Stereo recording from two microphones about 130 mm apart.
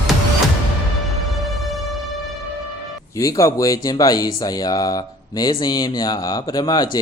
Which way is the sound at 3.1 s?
25° left (ahead or behind).